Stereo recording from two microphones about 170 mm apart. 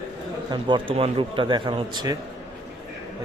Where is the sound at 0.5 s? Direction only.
30° right (ahead or behind).